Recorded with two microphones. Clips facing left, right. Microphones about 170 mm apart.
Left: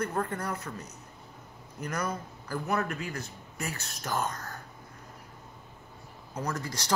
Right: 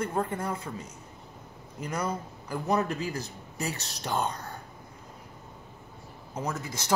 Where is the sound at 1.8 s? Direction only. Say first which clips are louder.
Right 2 dB; 25° right (ahead or behind).